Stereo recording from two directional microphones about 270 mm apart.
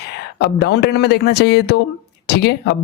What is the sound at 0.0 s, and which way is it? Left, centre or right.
Speech, left.